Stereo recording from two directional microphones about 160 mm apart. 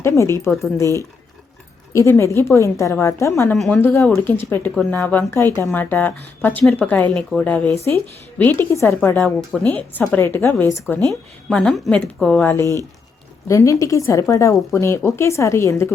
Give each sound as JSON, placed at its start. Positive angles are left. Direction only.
{"t": 0.0, "sound": "speech", "side_deg": 15}
{"t": 1.9, "sound": "speech", "side_deg": 15}
{"t": 3.5, "sound": "speech", "side_deg": 5}
{"t": 11.1, "sound": "speech", "side_deg": 5}